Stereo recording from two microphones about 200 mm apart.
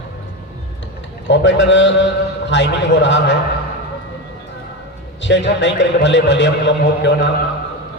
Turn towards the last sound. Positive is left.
turn(degrees=60)  # may be behind; listen again after turning